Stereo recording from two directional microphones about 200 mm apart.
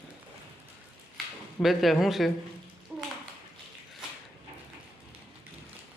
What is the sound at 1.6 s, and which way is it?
Speech, centre (ahead or behind).